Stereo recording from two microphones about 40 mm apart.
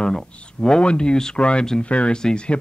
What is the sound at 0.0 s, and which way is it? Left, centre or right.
Speech, left.